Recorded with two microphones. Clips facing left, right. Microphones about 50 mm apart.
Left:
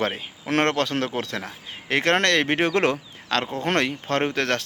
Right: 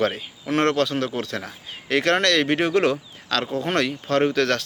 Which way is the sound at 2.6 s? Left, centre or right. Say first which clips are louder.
Right 1 dB; left.